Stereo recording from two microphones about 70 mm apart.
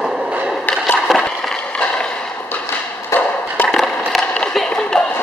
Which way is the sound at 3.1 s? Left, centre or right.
Left.